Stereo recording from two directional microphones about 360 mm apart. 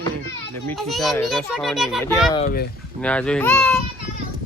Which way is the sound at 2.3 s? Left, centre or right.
Centre.